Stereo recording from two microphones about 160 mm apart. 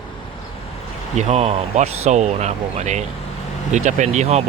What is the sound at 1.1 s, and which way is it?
Speech, 45° right (ahead or behind).